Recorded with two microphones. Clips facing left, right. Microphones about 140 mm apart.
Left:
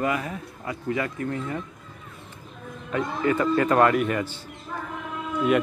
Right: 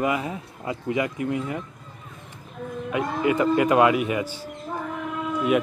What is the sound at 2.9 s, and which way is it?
Speech, 10° right (ahead or behind).